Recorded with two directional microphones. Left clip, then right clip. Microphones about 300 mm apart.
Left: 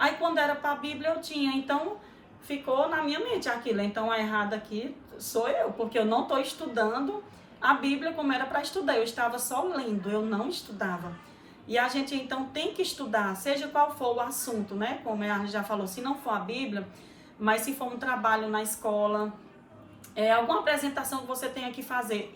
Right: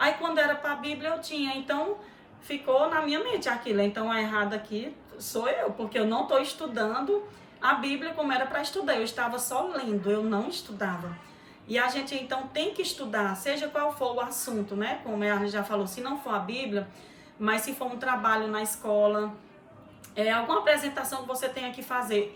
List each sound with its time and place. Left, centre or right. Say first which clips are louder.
0.0 s a woman's voice: right 1 dB; centre
20.1 s a woman's voice: left 1 dB; centre